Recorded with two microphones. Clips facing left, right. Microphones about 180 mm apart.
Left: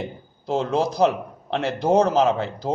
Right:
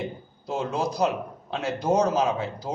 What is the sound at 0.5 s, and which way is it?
A man's voice, 90° left.